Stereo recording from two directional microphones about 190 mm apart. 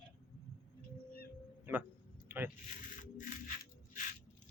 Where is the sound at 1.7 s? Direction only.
10° right (ahead or behind).